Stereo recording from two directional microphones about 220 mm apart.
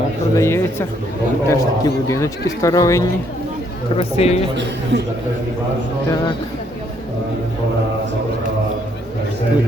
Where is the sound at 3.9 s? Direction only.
30° left (ahead or behind).